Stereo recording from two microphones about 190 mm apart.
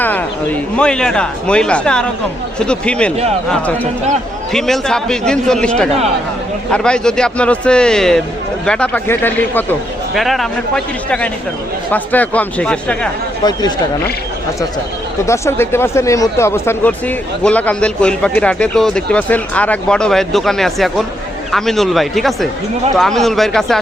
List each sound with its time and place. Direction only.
0.0 s a sound: 10° left (ahead or behind)
0.8 s a man's voice: 5° left (ahead or behind)
4.5 s a man's voice: centre (ahead or behind)
13.4 s speech: 20° left (ahead or behind)
15.3 s a man's voice: 15° left (ahead or behind)